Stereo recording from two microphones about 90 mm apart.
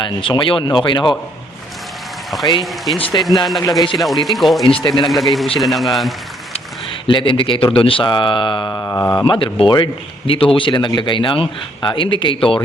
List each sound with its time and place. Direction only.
0.0 s speech: 65° left (ahead or behind)
2.6 s a man's voice: centre (ahead or behind)
3.6 s speech: 40° left (ahead or behind)
3.9 s a man's voice: centre (ahead or behind)
4.6 s speech: 70° left (ahead or behind)
5.0 s a man's voice: centre (ahead or behind)
7.1 s speech: 70° left (ahead or behind)
8.7 s a sound: 20° left (ahead or behind)
9.2 s speech: 75° left (ahead or behind)